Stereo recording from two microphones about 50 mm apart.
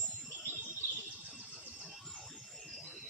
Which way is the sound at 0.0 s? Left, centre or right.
Right.